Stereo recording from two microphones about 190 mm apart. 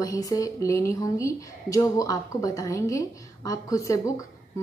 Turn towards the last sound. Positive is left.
turn(degrees=15)  # may be behind; listen again after turning